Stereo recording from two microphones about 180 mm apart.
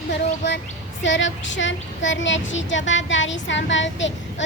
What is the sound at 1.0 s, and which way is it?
Child singing, 90° left.